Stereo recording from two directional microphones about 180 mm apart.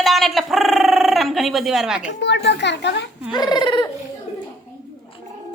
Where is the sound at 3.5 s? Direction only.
25° left (ahead or behind).